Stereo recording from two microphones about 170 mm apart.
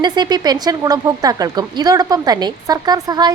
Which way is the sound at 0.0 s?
25° right (ahead or behind).